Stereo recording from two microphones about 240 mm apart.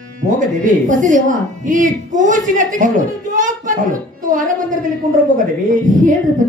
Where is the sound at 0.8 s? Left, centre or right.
Right.